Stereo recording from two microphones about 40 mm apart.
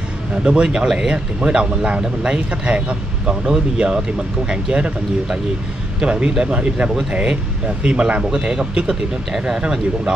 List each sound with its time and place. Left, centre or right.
0.4 s speech: right